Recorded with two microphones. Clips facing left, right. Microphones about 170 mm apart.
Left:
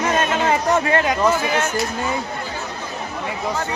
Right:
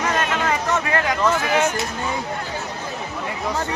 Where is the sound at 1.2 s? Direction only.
5° left (ahead or behind).